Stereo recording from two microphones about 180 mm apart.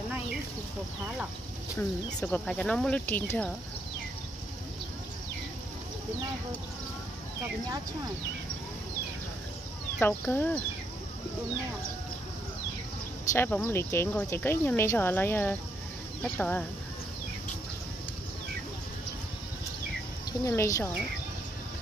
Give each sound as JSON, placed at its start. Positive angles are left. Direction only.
{"t": 2.1, "sound": "speech", "side_deg": 5}
{"t": 9.9, "sound": "speech", "side_deg": 10}
{"t": 13.3, "sound": "speech", "side_deg": 10}
{"t": 20.4, "sound": "speech", "side_deg": 15}